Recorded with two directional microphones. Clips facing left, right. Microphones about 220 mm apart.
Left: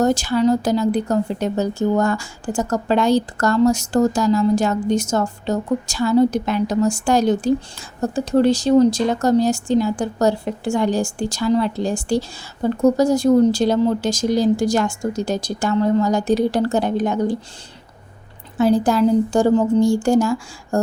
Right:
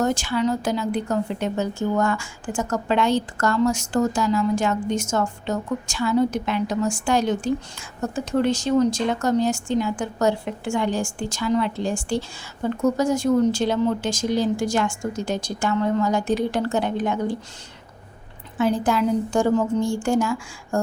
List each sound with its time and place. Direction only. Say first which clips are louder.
0.0 s speech: left 5 dB; 40° left (ahead or behind)
18.5 s speech: left 5 dB; 35° left (ahead or behind)